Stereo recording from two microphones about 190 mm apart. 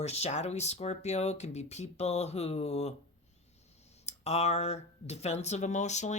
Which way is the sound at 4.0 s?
35° left (ahead or behind).